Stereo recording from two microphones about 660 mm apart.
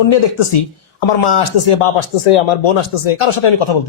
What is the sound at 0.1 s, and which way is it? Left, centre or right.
Speech, left.